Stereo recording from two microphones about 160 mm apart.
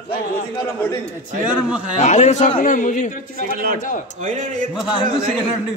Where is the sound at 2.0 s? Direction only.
45° left (ahead or behind).